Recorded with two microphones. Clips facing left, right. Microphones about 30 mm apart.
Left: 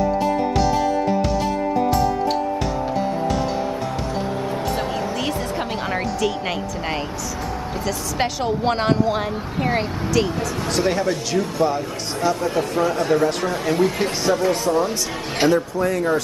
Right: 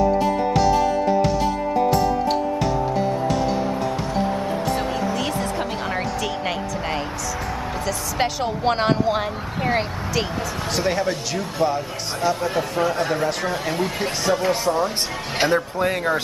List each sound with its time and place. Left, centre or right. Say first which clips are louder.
0.2 s music: even; centre
5.2 s music: even; centre
7.8 s a woman's voice: even; centre
15.5 s speech: left 1 dB; right